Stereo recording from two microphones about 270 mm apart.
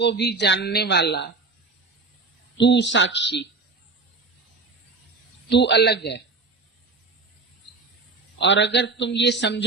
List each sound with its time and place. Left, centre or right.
0.0 s a man's voice: left
2.6 s a man's voice: left
5.5 s a man's voice: left
8.4 s a man's voice: left